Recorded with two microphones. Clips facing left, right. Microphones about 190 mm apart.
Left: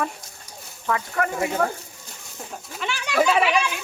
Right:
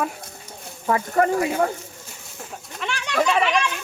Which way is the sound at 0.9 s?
35° right (ahead or behind).